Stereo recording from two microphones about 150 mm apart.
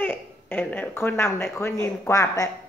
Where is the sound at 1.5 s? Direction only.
15° left (ahead or behind).